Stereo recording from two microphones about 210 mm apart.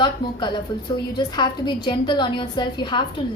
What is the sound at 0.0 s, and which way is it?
A woman's voice, 20° left (ahead or behind).